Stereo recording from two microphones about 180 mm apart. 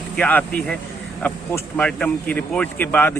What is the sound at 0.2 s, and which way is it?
Speech, 10° left (ahead or behind).